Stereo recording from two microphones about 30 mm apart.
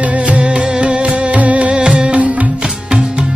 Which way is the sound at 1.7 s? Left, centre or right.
Right.